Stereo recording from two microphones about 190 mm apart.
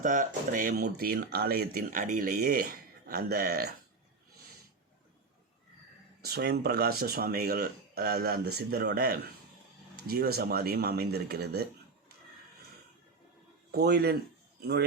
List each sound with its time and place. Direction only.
0.0 s speech: 45° right (ahead or behind)
6.2 s speech: 55° right (ahead or behind)
13.7 s speech: 55° right (ahead or behind)